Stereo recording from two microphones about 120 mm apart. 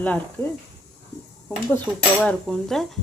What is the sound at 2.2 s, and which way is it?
Speech, 5° left (ahead or behind).